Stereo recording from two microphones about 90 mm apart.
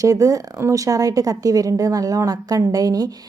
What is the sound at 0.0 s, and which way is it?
A woman's voice, 40° right (ahead or behind).